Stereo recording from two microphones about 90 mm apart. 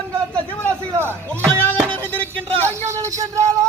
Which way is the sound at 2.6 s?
25° left (ahead or behind).